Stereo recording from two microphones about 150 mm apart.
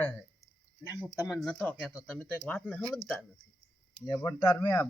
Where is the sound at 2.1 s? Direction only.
10° left (ahead or behind).